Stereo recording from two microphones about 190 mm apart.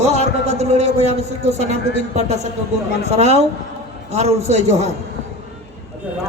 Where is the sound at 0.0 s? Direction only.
35° right (ahead or behind).